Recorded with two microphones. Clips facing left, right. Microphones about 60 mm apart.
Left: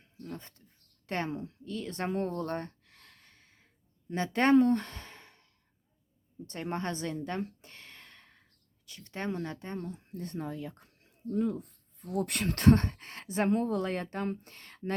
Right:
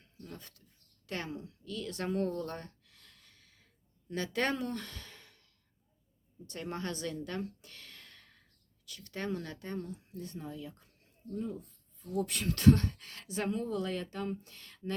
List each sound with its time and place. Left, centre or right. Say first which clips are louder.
0.0 s a sound: left 6 dB; centre
0.3 s a woman's voice: left 5 dB; left
6.5 s a woman's voice: left 4 dB; left
10.1 s speech: left 5 dB; left
11.0 s speech: left 8 dB; left